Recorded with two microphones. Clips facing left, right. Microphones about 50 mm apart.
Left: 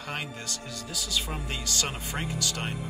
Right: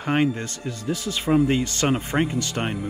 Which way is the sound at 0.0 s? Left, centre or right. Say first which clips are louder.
Right 13 dB; right.